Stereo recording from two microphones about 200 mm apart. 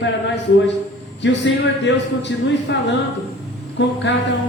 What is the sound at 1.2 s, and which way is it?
Speech, 60° left (ahead or behind).